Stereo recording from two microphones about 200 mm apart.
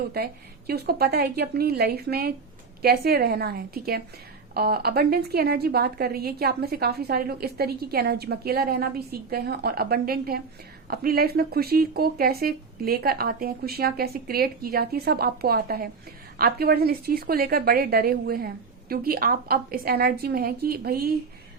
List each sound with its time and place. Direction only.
0.1 s a woman's voice: 50° right (ahead or behind)